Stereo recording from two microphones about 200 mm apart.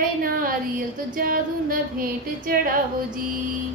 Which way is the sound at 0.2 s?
45° right (ahead or behind).